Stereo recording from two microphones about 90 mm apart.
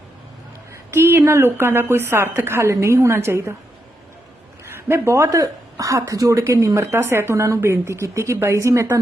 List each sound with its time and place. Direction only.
0.7 s speech: 25° right (ahead or behind)
4.6 s speech: 30° right (ahead or behind)